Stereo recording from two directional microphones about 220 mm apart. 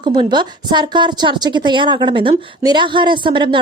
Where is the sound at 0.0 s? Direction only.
20° right (ahead or behind).